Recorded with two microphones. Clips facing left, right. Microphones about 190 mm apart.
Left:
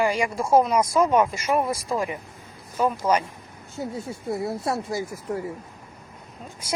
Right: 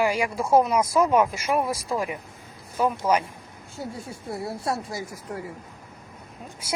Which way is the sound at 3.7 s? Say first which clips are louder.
Left 4 dB; 25° left (ahead or behind).